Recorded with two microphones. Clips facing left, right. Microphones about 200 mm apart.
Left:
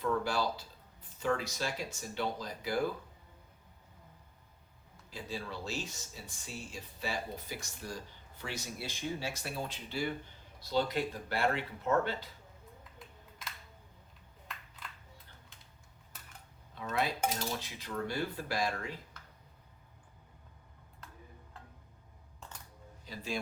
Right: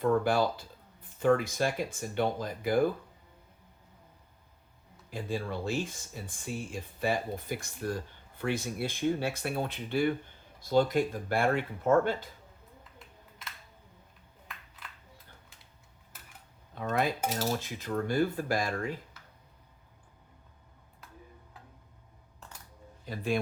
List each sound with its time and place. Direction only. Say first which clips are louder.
0.0 s speech: right 6 dB; 50° right (ahead or behind)
5.1 s speech: right 7 dB; 55° right (ahead or behind)
16.7 s dishes: right 4 dB; 50° right (ahead or behind)
17.5 s speech: right 7 dB; 50° right (ahead or behind)
23.0 s speech: right 8 dB; 55° right (ahead or behind)